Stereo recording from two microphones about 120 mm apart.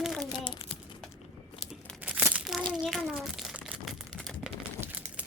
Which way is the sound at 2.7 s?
5° right (ahead or behind).